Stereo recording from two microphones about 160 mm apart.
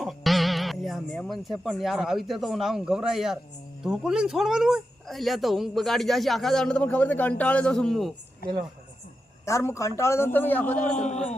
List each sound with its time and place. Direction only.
0.0 s speech: centre (ahead or behind)
9.5 s a man's voice: 20° left (ahead or behind)
10.9 s a man's voice: 45° left (ahead or behind)